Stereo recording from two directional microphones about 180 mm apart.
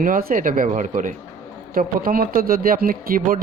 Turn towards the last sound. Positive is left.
turn(degrees=-50)  # may be behind; listen again after turning